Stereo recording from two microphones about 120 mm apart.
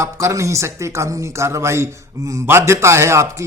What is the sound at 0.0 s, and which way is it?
A man's voice, 25° right (ahead or behind).